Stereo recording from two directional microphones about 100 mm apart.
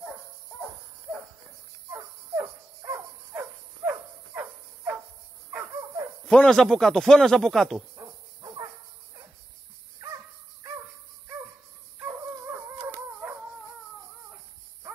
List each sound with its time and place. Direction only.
1.9 s cricket: 30° right (ahead or behind)
3.3 s dog: 20° right (ahead or behind)
6.2 s a man's voice: 10° left (ahead or behind)
7.9 s dog: 40° right (ahead or behind)
12.0 s dog: 25° right (ahead or behind)